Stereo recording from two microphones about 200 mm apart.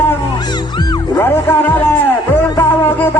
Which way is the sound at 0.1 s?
20° left (ahead or behind).